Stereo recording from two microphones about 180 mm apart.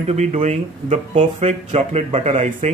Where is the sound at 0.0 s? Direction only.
40° right (ahead or behind).